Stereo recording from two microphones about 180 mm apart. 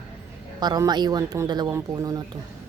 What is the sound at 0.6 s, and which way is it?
Speech, 20° right (ahead or behind).